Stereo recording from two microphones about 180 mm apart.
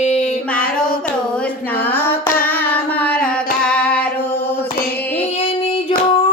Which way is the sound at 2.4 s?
10° left (ahead or behind).